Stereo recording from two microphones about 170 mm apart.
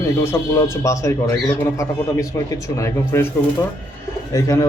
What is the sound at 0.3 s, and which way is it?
Speech, 20° left (ahead or behind).